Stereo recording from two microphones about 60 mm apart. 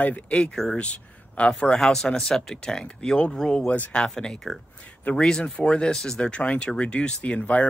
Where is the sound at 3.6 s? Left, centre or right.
Left.